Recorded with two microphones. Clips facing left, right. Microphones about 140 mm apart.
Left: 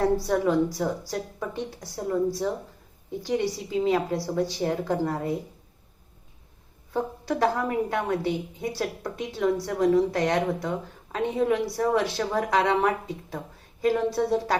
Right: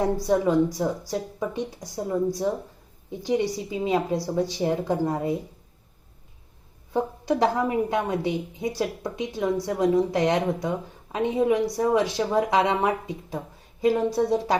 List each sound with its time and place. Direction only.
0.0 s a woman's voice: 20° right (ahead or behind)
6.9 s a woman's voice: 20° right (ahead or behind)